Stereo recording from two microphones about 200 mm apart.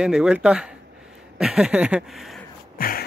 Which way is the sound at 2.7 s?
45° left (ahead or behind).